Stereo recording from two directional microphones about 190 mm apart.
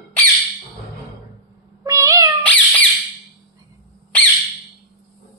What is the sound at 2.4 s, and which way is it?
Squeak, 10° left (ahead or behind).